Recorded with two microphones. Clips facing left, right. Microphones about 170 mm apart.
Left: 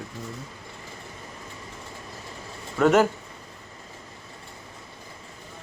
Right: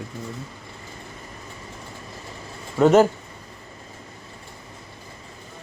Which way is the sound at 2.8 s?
30° right (ahead or behind).